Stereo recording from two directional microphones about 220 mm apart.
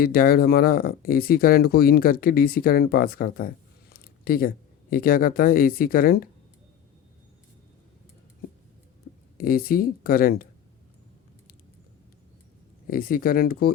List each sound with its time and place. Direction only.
0.0 s speech: 40° left (ahead or behind)
9.4 s speech: 40° left (ahead or behind)
12.9 s speech: 40° left (ahead or behind)